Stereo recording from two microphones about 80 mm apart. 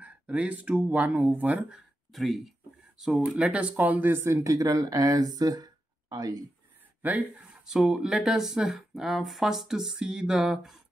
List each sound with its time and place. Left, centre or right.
0.0 s speech: centre
1.7 s speech: centre; by 6.4 s right
7.0 s speech: right
7.6 s speech: centre